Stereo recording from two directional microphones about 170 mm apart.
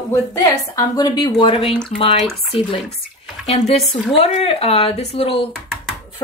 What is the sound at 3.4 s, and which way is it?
Speech, 35° left (ahead or behind).